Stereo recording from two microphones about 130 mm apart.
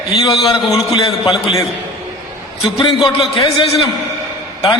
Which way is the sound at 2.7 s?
45° left (ahead or behind).